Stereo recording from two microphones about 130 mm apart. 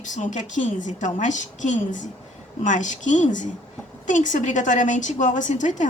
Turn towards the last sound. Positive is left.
turn(degrees=70)  # may be behind; listen again after turning